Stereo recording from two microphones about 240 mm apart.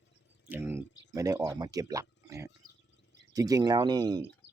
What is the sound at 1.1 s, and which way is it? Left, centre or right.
Speech, centre.